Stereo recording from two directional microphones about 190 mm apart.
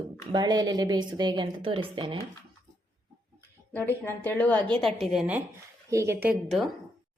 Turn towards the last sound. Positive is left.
turn(degrees=-10)  # may be behind; listen again after turning